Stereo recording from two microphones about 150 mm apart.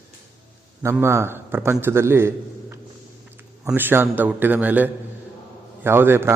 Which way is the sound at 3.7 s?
15° right (ahead or behind).